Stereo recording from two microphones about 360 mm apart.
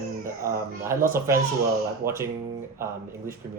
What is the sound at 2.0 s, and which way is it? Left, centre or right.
Speech, right.